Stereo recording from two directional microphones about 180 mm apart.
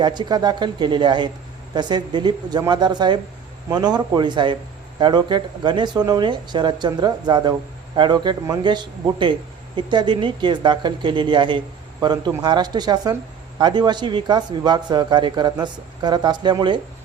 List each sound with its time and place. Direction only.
0.0 s speech: 25° right (ahead or behind)